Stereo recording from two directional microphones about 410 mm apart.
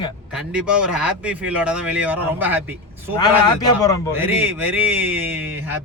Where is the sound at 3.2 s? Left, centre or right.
Centre.